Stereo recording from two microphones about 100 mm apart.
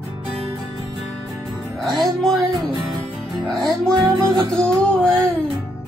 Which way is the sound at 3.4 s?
5° left (ahead or behind).